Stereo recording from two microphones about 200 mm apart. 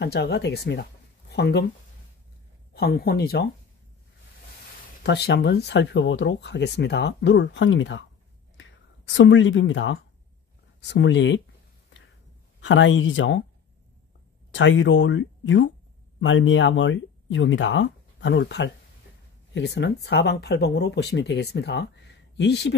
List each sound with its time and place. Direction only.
0.0 s speech: 55° left (ahead or behind)
2.7 s speech: 50° left (ahead or behind)
5.0 s speech: 55° left (ahead or behind)
12.5 s speech: 70° left (ahead or behind)
14.5 s speech: 70° left (ahead or behind)